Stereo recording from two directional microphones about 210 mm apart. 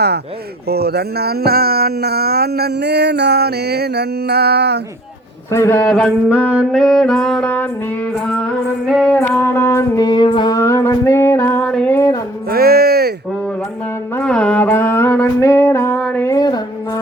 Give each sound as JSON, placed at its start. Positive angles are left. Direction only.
{"t": 0.7, "sound": "speech", "side_deg": -50}
{"t": 5.5, "sound": "music", "side_deg": 10}
{"t": 5.9, "sound": "music", "side_deg": 0}
{"t": 8.9, "sound": "music", "side_deg": 0}
{"t": 12.5, "sound": "music", "side_deg": -45}
{"t": 14.2, "sound": "music", "side_deg": 5}